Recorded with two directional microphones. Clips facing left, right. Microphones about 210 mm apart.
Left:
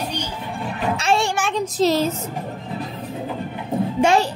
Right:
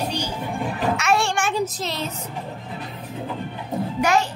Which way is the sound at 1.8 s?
40° left (ahead or behind).